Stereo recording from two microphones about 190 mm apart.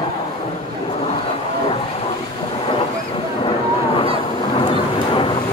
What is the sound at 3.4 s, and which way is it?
Vehicle, 25° left (ahead or behind).